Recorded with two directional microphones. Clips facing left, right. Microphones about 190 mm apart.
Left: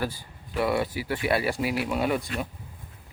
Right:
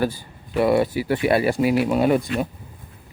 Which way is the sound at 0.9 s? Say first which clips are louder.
Right 8 dB; 25° right (ahead or behind).